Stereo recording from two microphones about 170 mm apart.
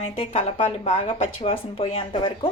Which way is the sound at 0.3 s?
40° left (ahead or behind).